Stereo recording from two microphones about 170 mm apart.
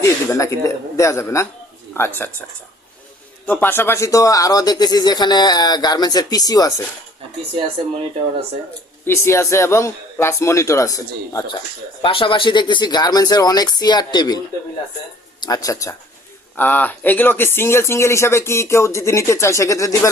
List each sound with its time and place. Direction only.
0.0 s speech: 20° left (ahead or behind)
3.4 s speech: 10° left (ahead or behind)
9.0 s speech: 15° left (ahead or behind)
12.0 s speech: 30° left (ahead or behind)